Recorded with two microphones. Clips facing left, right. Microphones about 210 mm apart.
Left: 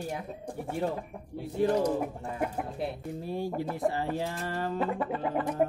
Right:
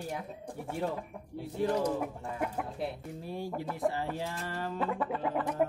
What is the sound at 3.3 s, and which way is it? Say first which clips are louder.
Speech: left 4 dB; 30° left (ahead or behind).